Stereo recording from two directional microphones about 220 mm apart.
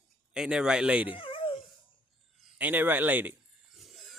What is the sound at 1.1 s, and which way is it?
Dog, 25° left (ahead or behind).